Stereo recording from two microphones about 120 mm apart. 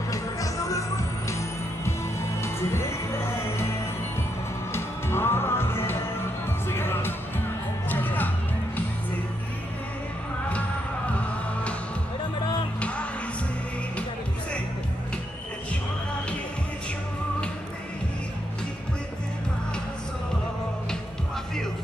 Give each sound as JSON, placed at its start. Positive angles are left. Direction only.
{"t": 0.1, "sound": "music", "side_deg": 25}
{"t": 4.7, "sound": "music", "side_deg": 20}